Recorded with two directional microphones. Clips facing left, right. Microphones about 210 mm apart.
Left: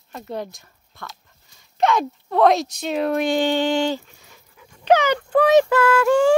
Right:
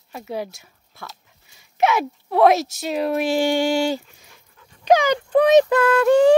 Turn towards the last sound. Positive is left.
turn(degrees=-20)  # may be behind; listen again after turning